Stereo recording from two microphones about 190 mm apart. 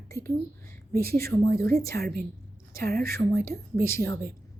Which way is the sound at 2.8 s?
55° right (ahead or behind).